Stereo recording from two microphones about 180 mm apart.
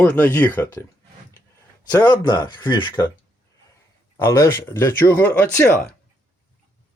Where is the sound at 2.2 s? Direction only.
25° left (ahead or behind).